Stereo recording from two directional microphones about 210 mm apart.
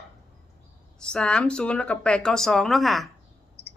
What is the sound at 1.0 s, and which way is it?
Speech, 5° left (ahead or behind).